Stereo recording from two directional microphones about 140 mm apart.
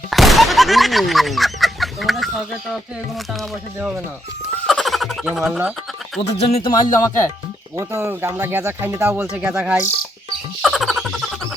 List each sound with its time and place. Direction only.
0.1 s speech: centre (ahead or behind)
3.8 s speech: 15° right (ahead or behind)
4.6 s a sound: centre (ahead or behind)
6.2 s speech: 40° left (ahead or behind); by 7.3 s 25° left (ahead or behind)
7.8 s speech: 15° right (ahead or behind)
10.6 s frog: centre (ahead or behind)